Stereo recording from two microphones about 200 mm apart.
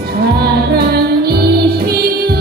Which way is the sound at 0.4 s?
50° right (ahead or behind).